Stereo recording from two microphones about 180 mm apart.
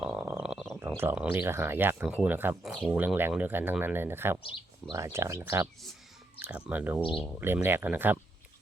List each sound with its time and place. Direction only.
0.0 s frog: 5° right (ahead or behind)
0.8 s speech: 10° right (ahead or behind)